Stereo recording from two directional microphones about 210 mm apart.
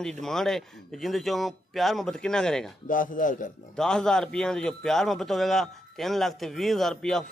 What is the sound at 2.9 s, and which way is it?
Speech, 40° left (ahead or behind).